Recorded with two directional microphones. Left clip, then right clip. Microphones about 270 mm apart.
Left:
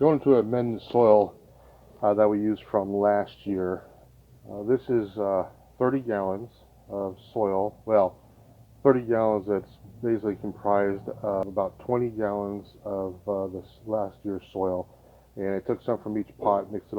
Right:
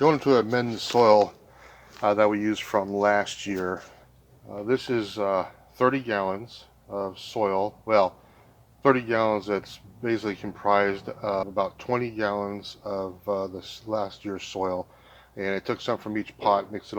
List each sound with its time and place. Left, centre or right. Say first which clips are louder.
0.0 s speech: even; right